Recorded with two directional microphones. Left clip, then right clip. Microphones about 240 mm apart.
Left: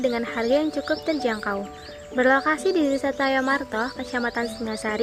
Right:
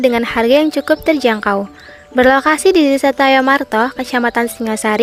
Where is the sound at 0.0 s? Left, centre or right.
Right.